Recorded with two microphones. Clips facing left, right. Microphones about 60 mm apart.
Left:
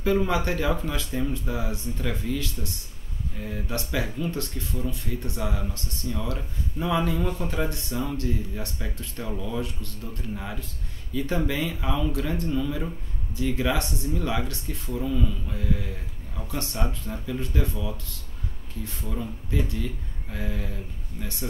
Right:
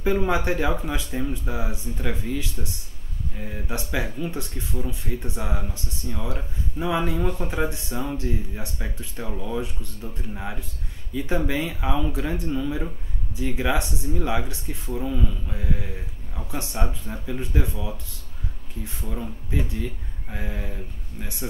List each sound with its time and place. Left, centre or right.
0.0 s speech: centre
19.1 s speech: centre